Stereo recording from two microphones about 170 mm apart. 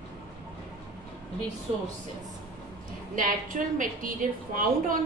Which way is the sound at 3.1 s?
50° right (ahead or behind).